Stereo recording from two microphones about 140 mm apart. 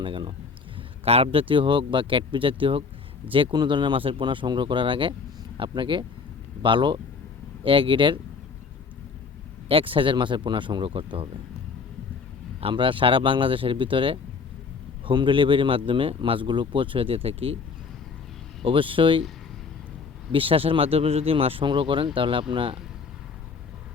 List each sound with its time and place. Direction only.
0.0 s speech: 35° right (ahead or behind)
9.6 s speech: 40° right (ahead or behind)
12.5 s speech: 40° right (ahead or behind)
18.6 s speech: 40° right (ahead or behind)
20.3 s speech: 40° right (ahead or behind)